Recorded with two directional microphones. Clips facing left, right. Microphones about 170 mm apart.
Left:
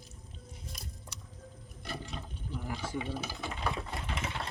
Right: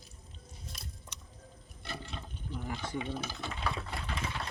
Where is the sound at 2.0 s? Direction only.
10° left (ahead or behind).